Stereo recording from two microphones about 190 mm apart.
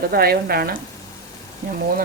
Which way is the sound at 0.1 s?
55° right (ahead or behind).